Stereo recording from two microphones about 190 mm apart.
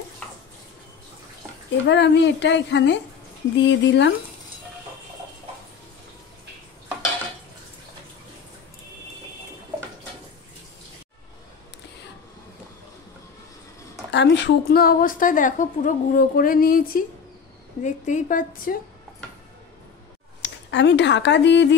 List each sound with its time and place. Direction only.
1.9 s speech: 70° left (ahead or behind)
14.1 s a woman's voice: 70° left (ahead or behind); by 17.0 s 50° left (ahead or behind)
17.8 s a woman's voice: 40° left (ahead or behind)
20.4 s speech: 70° left (ahead or behind)